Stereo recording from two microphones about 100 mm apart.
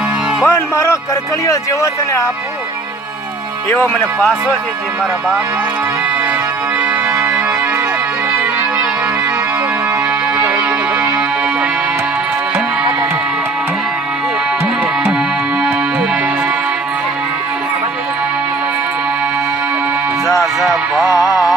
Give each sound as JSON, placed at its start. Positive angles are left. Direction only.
{"t": 0.4, "sound": "music", "side_deg": 30}
{"t": 1.5, "sound": "speech", "side_deg": 30}
{"t": 3.7, "sound": "speech", "side_deg": 25}
{"t": 7.2, "sound": "music", "side_deg": -20}
{"t": 21.1, "sound": "music", "side_deg": 35}